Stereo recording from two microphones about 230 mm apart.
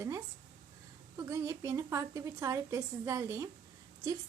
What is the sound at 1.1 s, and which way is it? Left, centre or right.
A woman's voice, centre.